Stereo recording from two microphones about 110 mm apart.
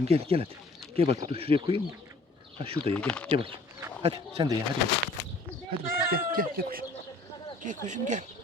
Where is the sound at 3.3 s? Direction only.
55° right (ahead or behind).